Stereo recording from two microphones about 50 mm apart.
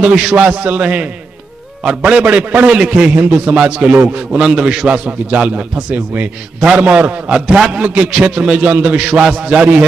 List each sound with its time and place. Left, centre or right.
0.0 s a man's voice: right
7.3 s a man's voice: centre
7.8 s a man's voice: right